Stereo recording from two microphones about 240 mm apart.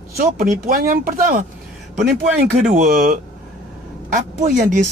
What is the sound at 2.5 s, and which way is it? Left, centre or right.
Speech, right.